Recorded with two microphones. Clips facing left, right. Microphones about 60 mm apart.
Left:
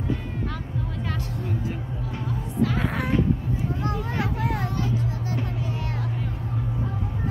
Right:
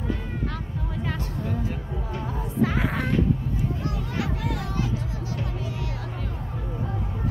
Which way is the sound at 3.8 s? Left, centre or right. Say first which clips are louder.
Left 2 dB; left.